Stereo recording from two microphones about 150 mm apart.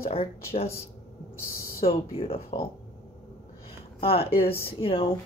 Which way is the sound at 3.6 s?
40° left (ahead or behind).